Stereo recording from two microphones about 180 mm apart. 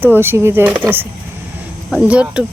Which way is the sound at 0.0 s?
10° right (ahead or behind).